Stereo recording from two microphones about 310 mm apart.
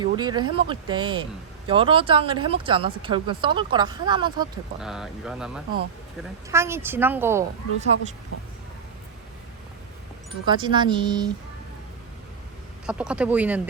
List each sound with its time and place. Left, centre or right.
0.0 s speech: centre
4.8 s speech: centre
10.4 s speech: centre
12.8 s speech: centre